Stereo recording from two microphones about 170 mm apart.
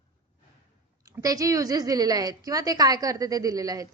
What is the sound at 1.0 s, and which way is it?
A woman's voice, 20° right (ahead or behind).